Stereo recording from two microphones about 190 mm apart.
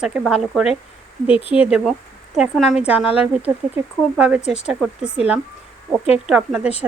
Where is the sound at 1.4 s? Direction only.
30° left (ahead or behind).